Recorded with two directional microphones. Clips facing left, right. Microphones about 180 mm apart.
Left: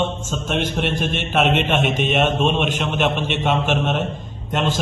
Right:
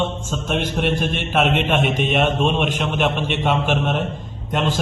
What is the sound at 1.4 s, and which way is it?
A man's voice, 10° right (ahead or behind).